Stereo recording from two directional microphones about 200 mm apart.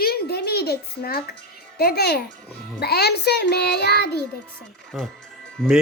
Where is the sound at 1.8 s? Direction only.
50° left (ahead or behind).